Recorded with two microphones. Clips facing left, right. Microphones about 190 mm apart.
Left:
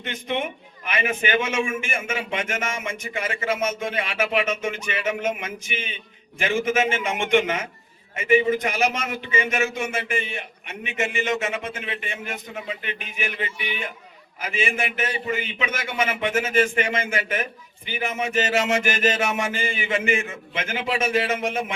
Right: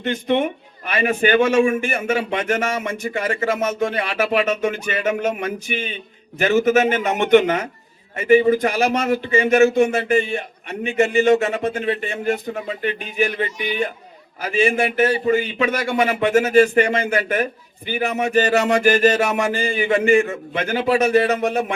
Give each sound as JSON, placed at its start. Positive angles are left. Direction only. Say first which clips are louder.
{"t": 0.0, "sound": "a man's voice", "louder": "right 8 dB", "side_deg": -40}